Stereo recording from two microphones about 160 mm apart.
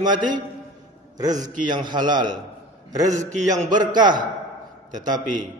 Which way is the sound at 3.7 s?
25° right (ahead or behind).